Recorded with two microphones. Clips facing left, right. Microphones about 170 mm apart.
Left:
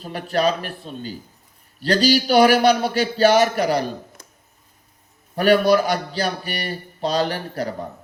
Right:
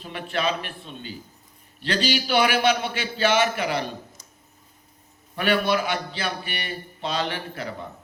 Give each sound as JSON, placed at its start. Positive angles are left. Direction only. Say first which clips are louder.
{"t": 0.0, "sound": "a man's voice", "louder": "left 6 dB", "side_deg": 40}
{"t": 4.2, "sound": "a sound", "louder": "left 5 dB", "side_deg": 60}
{"t": 5.3, "sound": "a man's voice", "louder": "left 7 dB", "side_deg": 40}